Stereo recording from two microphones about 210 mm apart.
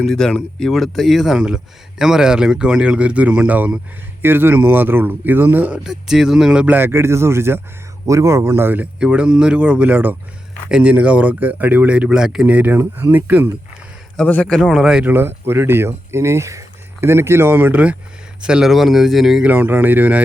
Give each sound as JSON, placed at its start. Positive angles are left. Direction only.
{"t": 0.0, "sound": "speech", "side_deg": 5}
{"t": 14.2, "sound": "speech", "side_deg": 5}